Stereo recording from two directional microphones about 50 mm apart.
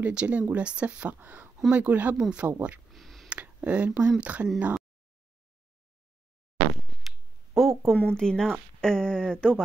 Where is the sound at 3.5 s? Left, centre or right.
Right.